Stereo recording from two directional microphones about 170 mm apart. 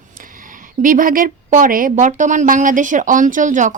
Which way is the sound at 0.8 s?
55° right (ahead or behind).